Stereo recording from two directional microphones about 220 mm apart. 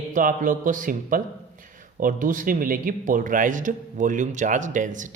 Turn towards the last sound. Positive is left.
turn(degrees=-35)  # may be behind; listen again after turning